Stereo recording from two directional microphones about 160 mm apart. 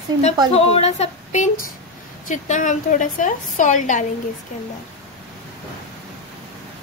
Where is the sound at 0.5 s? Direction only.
40° left (ahead or behind).